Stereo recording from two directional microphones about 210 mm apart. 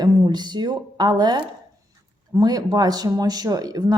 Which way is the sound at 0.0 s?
20° right (ahead or behind).